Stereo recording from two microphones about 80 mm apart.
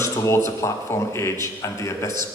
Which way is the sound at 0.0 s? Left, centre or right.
Left.